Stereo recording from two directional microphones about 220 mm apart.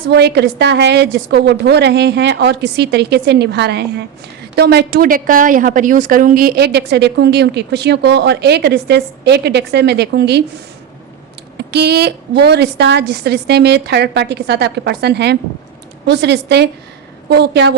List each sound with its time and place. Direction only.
0.1 s a woman's voice: 50° right (ahead or behind)
11.7 s a woman's voice: 50° right (ahead or behind)